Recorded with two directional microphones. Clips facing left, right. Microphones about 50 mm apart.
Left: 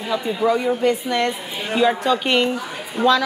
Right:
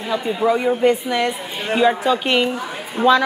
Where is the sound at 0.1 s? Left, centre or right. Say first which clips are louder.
Right 1 dB; centre.